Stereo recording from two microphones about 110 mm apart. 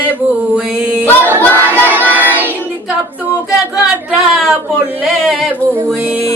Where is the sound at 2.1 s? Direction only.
15° right (ahead or behind).